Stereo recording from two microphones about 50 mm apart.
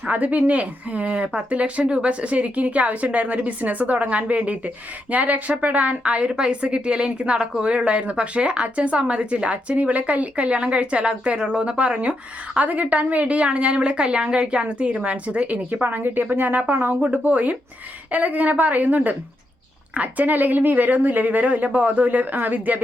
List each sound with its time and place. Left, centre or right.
0.1 s speech: right